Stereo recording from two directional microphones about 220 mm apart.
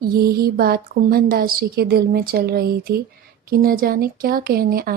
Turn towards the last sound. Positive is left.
turn(degrees=-45)  # may be behind; listen again after turning